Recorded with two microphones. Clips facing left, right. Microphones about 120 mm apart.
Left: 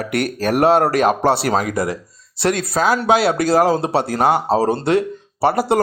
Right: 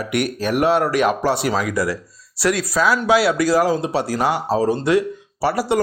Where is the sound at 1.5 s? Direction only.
50° left (ahead or behind).